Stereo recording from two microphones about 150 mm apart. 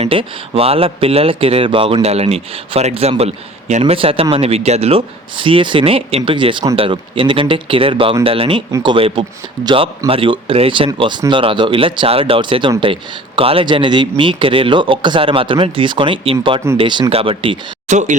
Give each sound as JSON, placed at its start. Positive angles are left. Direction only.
{"t": 0.0, "sound": "speech", "side_deg": -40}
{"t": 3.9, "sound": "speech", "side_deg": -35}
{"t": 17.8, "sound": "speech", "side_deg": -50}